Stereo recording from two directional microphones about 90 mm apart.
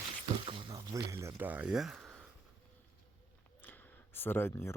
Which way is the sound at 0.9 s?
35° right (ahead or behind).